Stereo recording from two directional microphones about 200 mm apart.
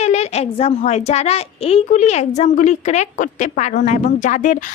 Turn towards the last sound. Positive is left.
turn(degrees=40)  # may be behind; listen again after turning